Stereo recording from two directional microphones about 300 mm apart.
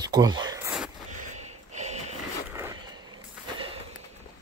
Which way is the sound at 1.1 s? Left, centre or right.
Right.